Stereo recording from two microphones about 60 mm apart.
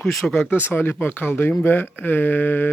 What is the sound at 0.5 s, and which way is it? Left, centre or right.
Speech, left.